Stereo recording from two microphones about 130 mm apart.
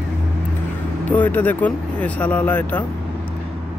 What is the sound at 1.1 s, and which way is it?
Speech, 15° left (ahead or behind).